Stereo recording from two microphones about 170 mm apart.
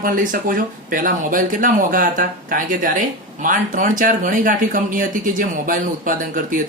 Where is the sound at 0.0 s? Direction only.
55° right (ahead or behind).